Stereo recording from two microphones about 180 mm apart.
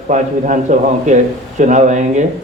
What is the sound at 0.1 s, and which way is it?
A man's voice, 45° right (ahead or behind).